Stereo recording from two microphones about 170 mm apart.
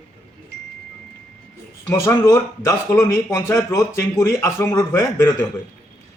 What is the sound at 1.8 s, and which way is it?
Speech, 20° left (ahead or behind).